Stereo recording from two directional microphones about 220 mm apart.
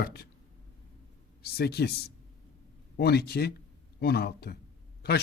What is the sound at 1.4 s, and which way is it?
Speech, 45° left (ahead or behind).